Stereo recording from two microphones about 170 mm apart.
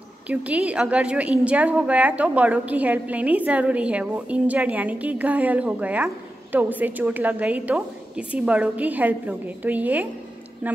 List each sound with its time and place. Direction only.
0.3 s a woman's voice: 10° right (ahead or behind)